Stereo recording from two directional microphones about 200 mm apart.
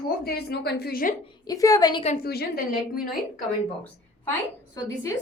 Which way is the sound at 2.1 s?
50° left (ahead or behind).